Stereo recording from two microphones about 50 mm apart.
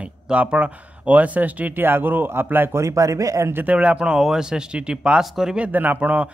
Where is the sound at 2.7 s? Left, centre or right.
Right.